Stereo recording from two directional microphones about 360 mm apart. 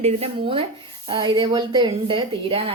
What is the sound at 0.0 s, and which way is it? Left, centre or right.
A woman's voice, centre.